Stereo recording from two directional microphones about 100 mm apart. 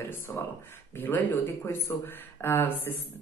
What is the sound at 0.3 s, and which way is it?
Speech, 25° left (ahead or behind).